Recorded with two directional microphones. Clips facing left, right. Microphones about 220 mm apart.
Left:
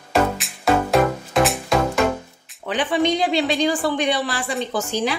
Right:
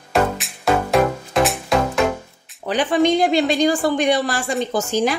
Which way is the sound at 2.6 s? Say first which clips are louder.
Right 3 dB; 45° right (ahead or behind).